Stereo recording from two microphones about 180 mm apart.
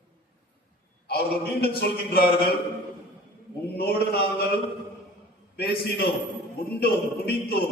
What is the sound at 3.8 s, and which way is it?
A man's voice, 60° left (ahead or behind).